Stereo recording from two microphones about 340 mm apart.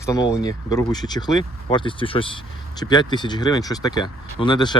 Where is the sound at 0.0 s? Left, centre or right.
Centre.